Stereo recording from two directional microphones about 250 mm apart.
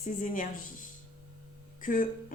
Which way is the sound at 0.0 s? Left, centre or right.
Left.